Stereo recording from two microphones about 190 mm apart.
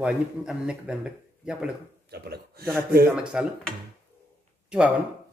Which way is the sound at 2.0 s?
55° right (ahead or behind).